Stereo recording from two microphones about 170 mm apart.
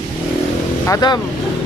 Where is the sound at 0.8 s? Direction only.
20° left (ahead or behind).